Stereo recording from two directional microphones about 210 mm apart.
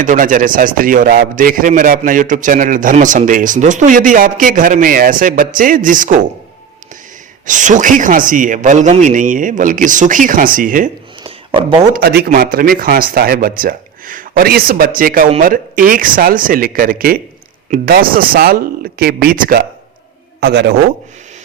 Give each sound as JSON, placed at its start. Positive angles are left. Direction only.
{"t": 0.0, "sound": "a man's voice", "side_deg": -40}
{"t": 7.4, "sound": "a man's voice", "side_deg": -35}
{"t": 11.9, "sound": "a man's voice", "side_deg": -45}